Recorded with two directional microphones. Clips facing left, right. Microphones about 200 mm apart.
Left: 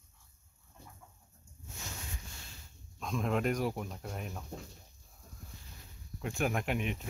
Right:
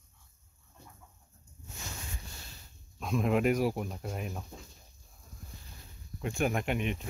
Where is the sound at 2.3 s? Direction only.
40° right (ahead or behind).